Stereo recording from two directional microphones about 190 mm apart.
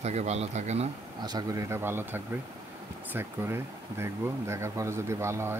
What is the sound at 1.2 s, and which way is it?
Speech, 20° right (ahead or behind).